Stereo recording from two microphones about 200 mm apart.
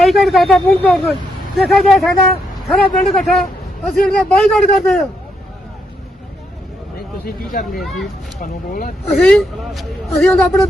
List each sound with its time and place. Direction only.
0.0 s a man's voice: centre (ahead or behind)
7.7 s a man's voice: centre (ahead or behind)
8.4 s speech: 40° left (ahead or behind)
9.0 s a man's voice: 5° left (ahead or behind)